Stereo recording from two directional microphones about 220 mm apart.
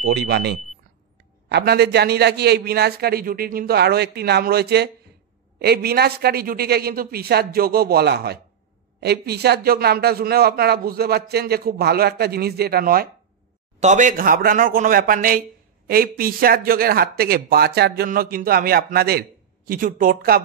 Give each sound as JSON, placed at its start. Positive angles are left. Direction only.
{"t": 0.0, "sound": "a man's voice", "side_deg": -50}